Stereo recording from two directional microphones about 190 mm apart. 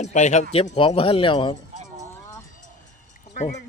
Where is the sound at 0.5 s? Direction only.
30° left (ahead or behind).